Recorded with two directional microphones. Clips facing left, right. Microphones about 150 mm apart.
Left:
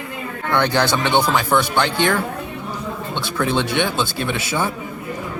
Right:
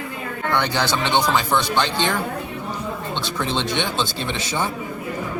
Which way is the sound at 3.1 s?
10° left (ahead or behind).